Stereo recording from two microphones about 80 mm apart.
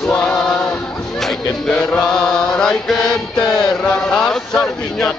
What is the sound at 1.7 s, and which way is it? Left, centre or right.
Mantra, centre.